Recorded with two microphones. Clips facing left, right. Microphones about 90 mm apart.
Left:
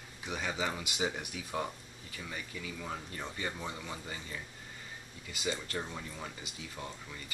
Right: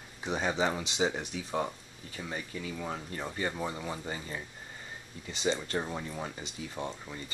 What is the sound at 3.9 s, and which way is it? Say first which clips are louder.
Speech: right 5 dB; 35° right (ahead or behind).